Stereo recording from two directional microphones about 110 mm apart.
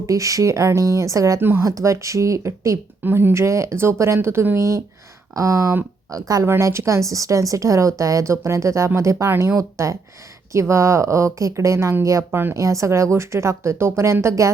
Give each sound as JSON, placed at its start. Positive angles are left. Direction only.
{"t": 0.0, "sound": "speech", "side_deg": -30}